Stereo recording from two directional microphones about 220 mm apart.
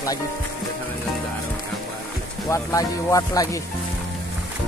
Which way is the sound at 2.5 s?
15° left (ahead or behind).